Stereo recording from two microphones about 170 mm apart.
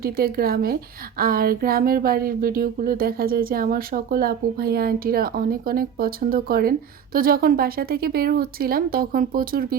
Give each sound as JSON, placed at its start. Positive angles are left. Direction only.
{"t": 0.0, "sound": "speech", "side_deg": -60}